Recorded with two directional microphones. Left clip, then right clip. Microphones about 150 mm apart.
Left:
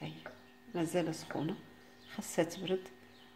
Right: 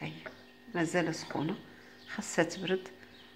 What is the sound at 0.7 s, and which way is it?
A woman's voice, 20° left (ahead or behind).